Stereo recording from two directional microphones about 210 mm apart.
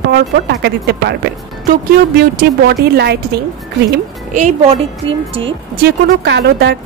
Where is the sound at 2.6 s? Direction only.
50° right (ahead or behind).